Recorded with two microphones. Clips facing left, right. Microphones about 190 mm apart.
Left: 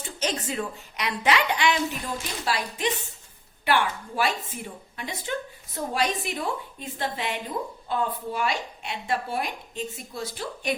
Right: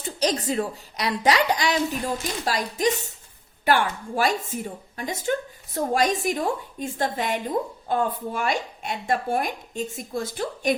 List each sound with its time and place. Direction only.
0.0 s a woman's voice: 35° right (ahead or behind)